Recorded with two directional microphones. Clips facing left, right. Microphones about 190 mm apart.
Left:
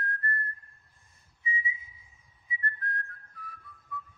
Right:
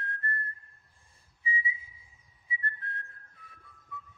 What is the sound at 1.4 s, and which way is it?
Whistling, 30° right (ahead or behind).